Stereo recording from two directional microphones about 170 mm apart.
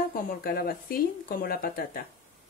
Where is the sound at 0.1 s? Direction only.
60° left (ahead or behind).